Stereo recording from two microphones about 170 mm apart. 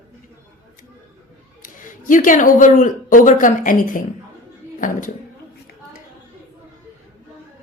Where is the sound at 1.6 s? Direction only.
50° left (ahead or behind).